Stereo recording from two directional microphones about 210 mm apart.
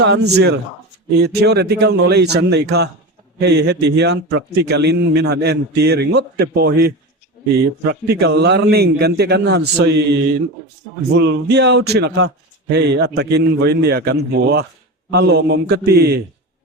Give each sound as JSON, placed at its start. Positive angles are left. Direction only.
{"t": 0.0, "sound": "a man's voice", "side_deg": -55}